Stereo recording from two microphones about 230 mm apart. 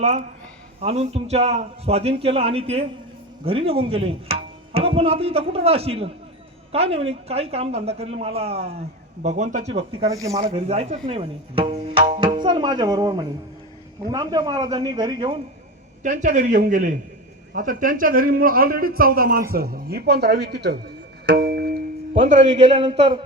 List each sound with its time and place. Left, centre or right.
0.0 s a man's voice: right
16.0 s a man's voice: right
21.2 s music: right
22.1 s speech: right